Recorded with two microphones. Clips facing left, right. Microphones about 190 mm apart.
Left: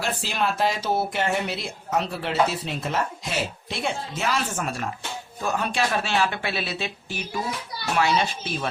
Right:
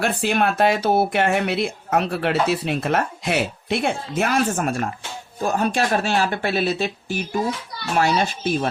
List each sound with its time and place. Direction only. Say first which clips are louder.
0.0 s speech: right 6 dB; 60° right (ahead or behind); by 6.9 s 45° right (ahead or behind)
7.9 s speech: right 3 dB; 45° right (ahead or behind)